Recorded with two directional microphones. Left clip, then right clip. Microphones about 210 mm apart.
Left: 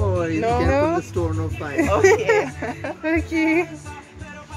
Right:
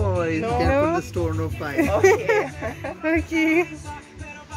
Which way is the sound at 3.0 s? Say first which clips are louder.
Even; 10° right (ahead or behind).